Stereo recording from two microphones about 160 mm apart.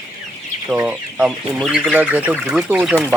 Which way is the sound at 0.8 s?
5° right (ahead or behind).